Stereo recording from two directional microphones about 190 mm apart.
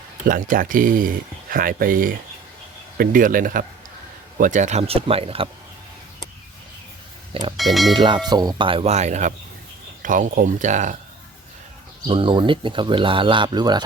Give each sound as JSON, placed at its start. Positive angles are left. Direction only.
{"t": 0.3, "sound": "speech", "side_deg": -45}
{"t": 7.5, "sound": "speech", "side_deg": 0}
{"t": 7.9, "sound": "speech", "side_deg": -25}
{"t": 12.0, "sound": "speech", "side_deg": -25}